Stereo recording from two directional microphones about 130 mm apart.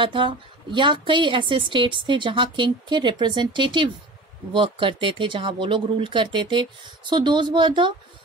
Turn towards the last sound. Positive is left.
turn(degrees=-40)  # may be behind; listen again after turning